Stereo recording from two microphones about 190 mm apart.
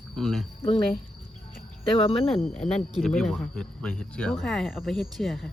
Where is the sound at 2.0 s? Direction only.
30° left (ahead or behind).